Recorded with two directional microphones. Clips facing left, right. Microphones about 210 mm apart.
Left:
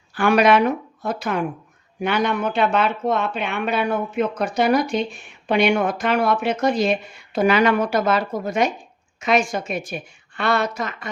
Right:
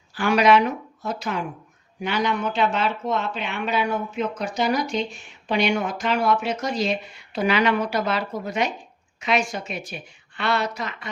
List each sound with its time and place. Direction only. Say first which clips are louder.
0.1 s a woman's voice: left 2 dB; 55° left (ahead or behind)